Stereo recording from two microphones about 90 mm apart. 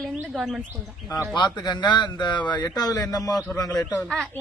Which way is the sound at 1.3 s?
55° left (ahead or behind).